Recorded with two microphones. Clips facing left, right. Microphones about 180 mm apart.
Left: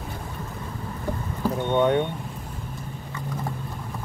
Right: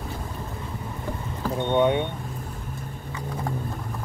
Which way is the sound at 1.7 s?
15° right (ahead or behind).